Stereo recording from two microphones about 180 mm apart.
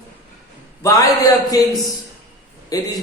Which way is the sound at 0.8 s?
20° left (ahead or behind).